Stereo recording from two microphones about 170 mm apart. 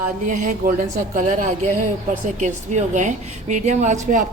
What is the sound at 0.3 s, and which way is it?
A woman's voice, 50° right (ahead or behind).